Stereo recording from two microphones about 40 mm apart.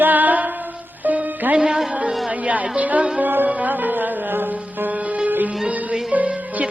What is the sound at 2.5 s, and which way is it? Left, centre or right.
Music, right.